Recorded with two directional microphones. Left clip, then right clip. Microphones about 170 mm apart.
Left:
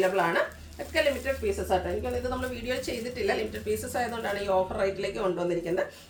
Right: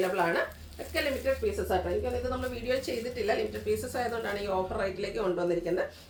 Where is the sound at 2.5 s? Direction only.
15° left (ahead or behind).